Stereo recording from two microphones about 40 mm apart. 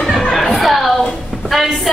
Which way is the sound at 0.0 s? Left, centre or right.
Centre.